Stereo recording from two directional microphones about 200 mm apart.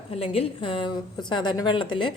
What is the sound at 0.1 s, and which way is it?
A woman's voice, 30° left (ahead or behind).